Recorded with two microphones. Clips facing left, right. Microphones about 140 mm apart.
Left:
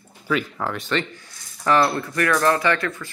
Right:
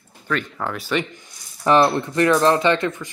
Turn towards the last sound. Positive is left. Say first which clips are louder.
# right 3 dB
turn(degrees=-20)  # may be behind; listen again after turning